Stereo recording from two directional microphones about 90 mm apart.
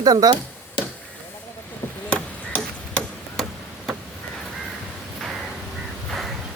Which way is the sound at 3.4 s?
Centre (ahead or behind).